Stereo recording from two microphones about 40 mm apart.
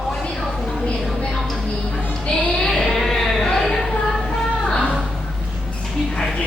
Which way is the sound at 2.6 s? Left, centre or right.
Centre.